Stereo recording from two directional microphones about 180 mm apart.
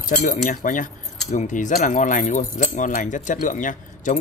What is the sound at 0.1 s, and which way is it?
Speech, 45° left (ahead or behind).